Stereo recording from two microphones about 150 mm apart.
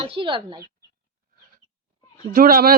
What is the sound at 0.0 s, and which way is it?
Speech, 35° right (ahead or behind).